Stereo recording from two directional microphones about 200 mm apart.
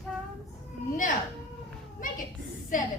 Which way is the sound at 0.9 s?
40° left (ahead or behind).